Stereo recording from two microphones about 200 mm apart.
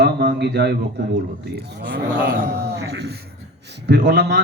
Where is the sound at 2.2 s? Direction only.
55° right (ahead or behind).